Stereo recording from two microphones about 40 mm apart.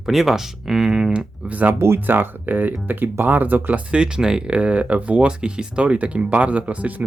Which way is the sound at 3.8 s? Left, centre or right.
Right.